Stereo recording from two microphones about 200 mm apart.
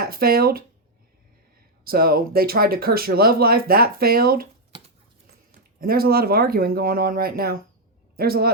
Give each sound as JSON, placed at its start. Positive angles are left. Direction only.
{"t": 0.0, "sound": "speech", "side_deg": -50}
{"t": 1.8, "sound": "speech", "side_deg": -50}
{"t": 5.8, "sound": "a man's voice", "side_deg": -50}